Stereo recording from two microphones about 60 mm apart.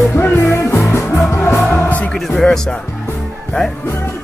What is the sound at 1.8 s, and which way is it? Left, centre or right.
Music, left.